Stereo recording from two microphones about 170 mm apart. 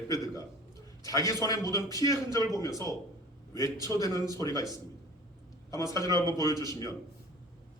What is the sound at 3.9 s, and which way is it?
Speech, 20° left (ahead or behind).